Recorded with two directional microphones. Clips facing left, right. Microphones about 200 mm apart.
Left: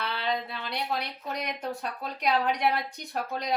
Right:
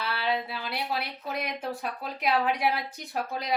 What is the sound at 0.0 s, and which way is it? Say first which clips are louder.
A woman's voice: right 1 dB; 5° right (ahead or behind).